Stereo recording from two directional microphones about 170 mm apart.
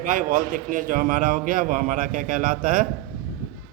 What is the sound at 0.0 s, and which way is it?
A man's voice, 50° right (ahead or behind).